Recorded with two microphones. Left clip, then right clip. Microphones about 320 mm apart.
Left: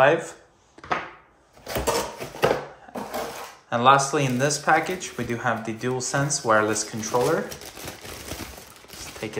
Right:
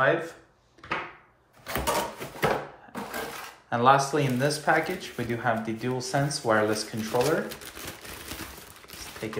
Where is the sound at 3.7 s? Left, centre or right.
Centre.